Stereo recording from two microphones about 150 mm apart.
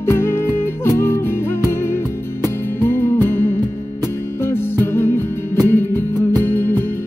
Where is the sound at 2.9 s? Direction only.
15° left (ahead or behind).